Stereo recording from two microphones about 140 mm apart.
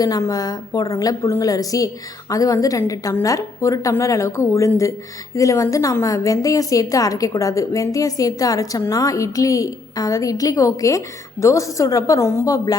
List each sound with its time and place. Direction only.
0.0 s a woman's voice: 25° left (ahead or behind)